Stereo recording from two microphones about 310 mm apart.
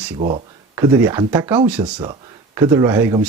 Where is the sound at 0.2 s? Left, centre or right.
Right.